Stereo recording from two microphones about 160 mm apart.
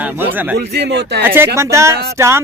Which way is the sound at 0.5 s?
90° right.